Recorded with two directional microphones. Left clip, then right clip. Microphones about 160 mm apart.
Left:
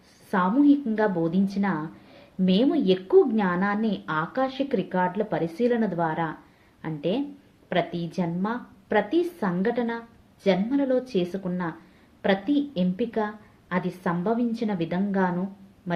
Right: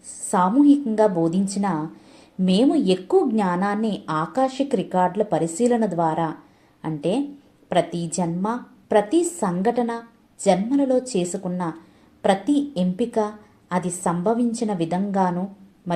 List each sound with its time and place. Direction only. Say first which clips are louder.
0.3 s a woman's voice: right 4 dB; 10° right (ahead or behind)